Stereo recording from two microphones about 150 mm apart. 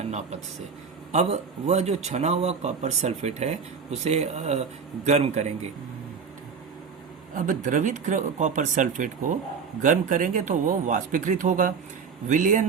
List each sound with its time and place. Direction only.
0.0 s speech: 50° right (ahead or behind)
7.3 s speech: 60° right (ahead or behind)